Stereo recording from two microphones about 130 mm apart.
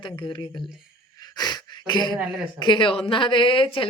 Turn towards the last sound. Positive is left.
turn(degrees=40)  # may be behind; listen again after turning